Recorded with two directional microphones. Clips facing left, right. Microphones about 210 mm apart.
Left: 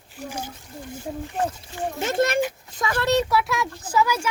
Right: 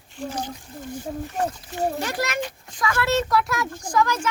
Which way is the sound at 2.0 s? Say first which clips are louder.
Left 5 dB; 25° left (ahead or behind).